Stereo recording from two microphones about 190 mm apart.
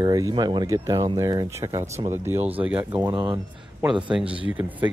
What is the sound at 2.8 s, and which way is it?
Speech, 20° right (ahead or behind).